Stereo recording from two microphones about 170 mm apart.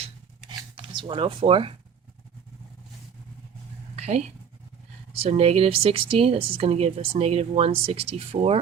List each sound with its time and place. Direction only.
0.9 s speech: 30° right (ahead or behind)
3.9 s a sound: 40° right (ahead or behind)
5.2 s speech: 35° right (ahead or behind)